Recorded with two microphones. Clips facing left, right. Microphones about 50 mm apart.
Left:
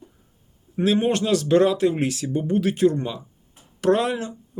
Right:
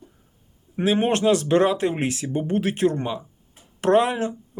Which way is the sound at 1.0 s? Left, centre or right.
Right.